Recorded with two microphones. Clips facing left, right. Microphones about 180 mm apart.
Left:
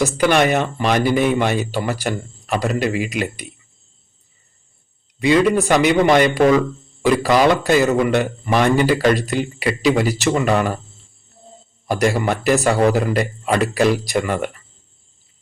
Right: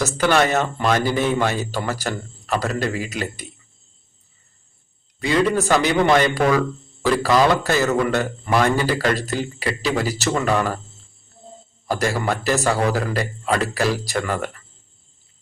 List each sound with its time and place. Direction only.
0.0 s speech: 15° left (ahead or behind)
5.2 s speech: 15° left (ahead or behind)
11.9 s speech: 15° left (ahead or behind)